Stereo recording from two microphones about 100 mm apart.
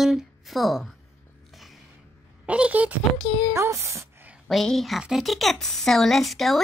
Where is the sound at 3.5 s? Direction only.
30° right (ahead or behind).